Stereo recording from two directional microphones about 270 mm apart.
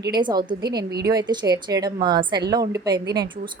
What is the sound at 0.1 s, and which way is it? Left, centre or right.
Speech, centre.